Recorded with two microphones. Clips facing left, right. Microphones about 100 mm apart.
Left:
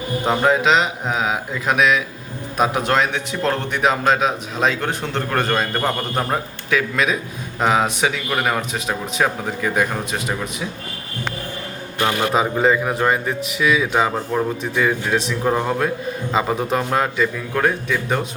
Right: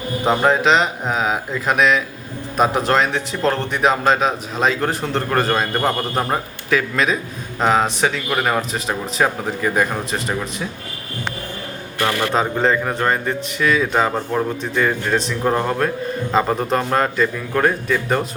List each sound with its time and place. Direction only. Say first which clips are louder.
0.3 s speech: right 1 dB; centre (ahead or behind)
11.9 s a man's voice: even; 20° left (ahead or behind)
12.3 s speech: left 2 dB; 5° left (ahead or behind)